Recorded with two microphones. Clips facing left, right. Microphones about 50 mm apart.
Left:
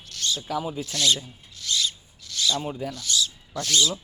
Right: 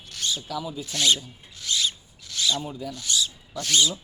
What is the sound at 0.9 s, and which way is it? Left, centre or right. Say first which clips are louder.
Speech: right 1 dB; right.